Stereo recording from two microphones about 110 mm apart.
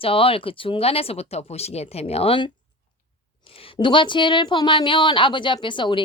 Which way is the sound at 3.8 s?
50° left (ahead or behind).